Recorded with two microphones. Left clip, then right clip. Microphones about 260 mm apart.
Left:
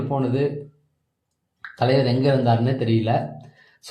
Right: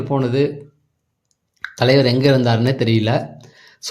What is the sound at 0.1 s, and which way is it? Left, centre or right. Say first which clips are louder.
Speech: right 6 dB; right.